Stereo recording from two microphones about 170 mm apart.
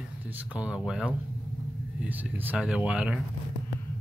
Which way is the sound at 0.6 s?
5° right (ahead or behind).